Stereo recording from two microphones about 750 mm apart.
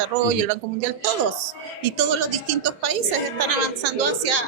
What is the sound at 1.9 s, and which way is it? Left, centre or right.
A woman's voice, right.